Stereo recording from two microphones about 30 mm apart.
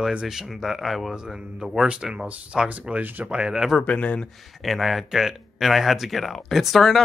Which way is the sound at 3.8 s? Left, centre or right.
Left.